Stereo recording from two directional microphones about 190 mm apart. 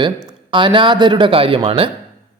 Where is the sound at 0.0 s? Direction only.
25° right (ahead or behind).